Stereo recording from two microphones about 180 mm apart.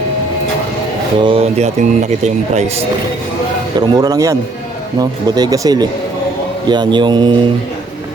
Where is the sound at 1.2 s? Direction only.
30° right (ahead or behind).